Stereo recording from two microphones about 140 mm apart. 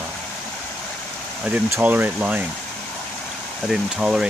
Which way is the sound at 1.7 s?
15° right (ahead or behind).